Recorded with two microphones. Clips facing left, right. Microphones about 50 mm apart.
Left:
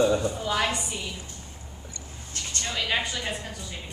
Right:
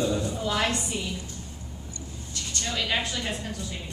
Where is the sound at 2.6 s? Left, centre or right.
Centre.